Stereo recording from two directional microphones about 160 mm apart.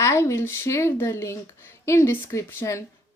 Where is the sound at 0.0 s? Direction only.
15° left (ahead or behind).